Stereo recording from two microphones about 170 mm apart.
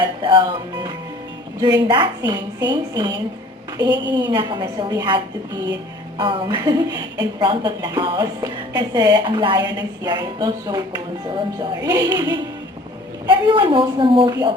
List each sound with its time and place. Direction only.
0.2 s a woman's voice: 30° right (ahead or behind)